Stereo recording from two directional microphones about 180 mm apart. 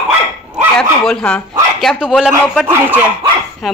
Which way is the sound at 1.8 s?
Centre (ahead or behind).